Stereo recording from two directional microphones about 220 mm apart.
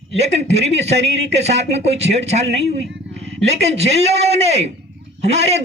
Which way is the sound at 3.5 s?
30° right (ahead or behind).